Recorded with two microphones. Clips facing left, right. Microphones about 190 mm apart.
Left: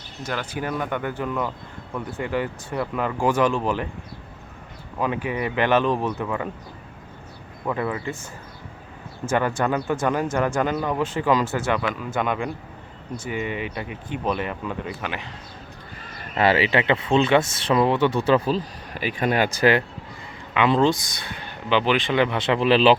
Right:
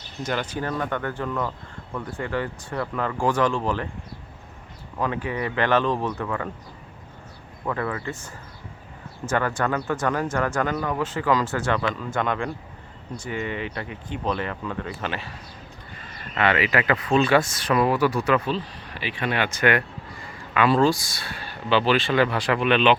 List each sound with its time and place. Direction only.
0.2 s speech: 5° left (ahead or behind)
4.9 s speech: 15° left (ahead or behind)
7.6 s speech: 15° left (ahead or behind)
9.2 s speech: 10° left (ahead or behind)
16.3 s speech: 30° left (ahead or behind)
20.5 s speech: 20° left (ahead or behind)